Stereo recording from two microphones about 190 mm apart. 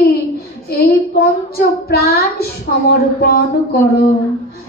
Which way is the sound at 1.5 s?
55° left (ahead or behind).